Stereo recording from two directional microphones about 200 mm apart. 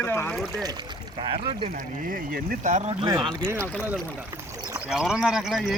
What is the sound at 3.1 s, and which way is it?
Speech, 20° right (ahead or behind).